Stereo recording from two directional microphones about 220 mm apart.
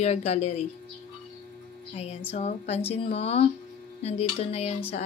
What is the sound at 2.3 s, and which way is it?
Speech, 30° left (ahead or behind).